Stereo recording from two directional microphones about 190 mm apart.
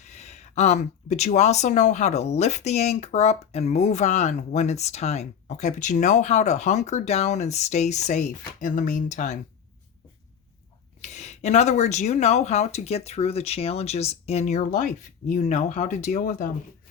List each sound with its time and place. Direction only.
0.1 s speech: 35° left (ahead or behind)
11.0 s speech: 35° left (ahead or behind)